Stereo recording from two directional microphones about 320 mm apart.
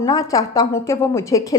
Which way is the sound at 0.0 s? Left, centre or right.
Centre.